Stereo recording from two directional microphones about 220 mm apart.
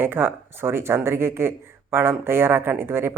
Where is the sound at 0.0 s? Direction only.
10° right (ahead or behind).